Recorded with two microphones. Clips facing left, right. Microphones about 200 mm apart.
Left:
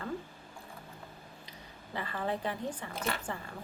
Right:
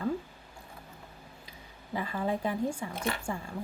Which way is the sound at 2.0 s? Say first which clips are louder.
Right 3 dB; 10° right (ahead or behind).